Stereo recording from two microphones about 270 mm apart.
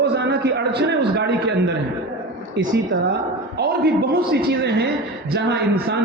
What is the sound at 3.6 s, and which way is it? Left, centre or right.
Speech, right.